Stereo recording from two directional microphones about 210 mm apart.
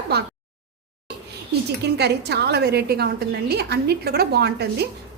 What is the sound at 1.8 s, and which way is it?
A woman's voice, 50° right (ahead or behind).